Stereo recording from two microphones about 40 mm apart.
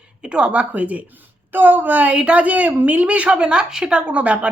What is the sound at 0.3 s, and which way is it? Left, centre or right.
Speech, right.